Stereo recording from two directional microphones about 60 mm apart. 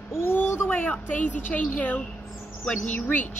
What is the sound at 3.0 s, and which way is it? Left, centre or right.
Speech, left.